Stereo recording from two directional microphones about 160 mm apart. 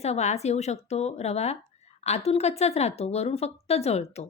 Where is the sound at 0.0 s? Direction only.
45° left (ahead or behind).